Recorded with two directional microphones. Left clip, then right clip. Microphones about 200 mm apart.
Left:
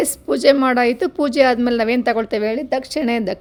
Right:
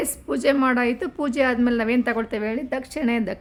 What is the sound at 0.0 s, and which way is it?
A woman's voice, 25° left (ahead or behind).